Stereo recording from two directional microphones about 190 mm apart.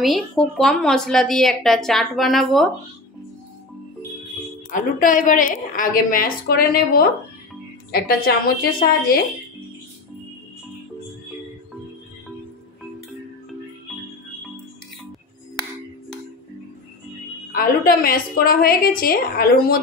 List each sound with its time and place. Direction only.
0.0 s a woman's voice: centre (ahead or behind)
4.6 s a woman's voice: 45° left (ahead or behind)
17.6 s a woman's voice: 50° left (ahead or behind)